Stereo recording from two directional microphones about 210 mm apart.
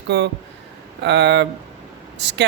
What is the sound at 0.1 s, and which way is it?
Speech, 55° right (ahead or behind).